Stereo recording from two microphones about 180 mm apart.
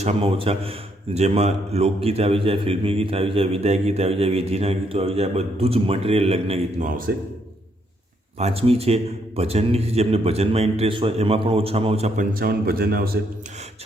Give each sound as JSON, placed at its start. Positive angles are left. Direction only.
{"t": 0.0, "sound": "speech", "side_deg": -30}
{"t": 7.1, "sound": "a man's voice", "side_deg": -60}
{"t": 8.4, "sound": "speech", "side_deg": -35}